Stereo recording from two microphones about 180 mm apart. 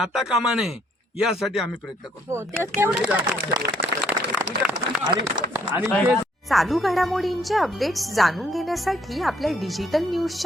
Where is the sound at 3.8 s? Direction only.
60° right (ahead or behind).